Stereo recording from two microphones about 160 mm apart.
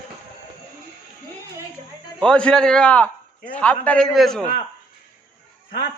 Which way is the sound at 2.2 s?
5° left (ahead or behind).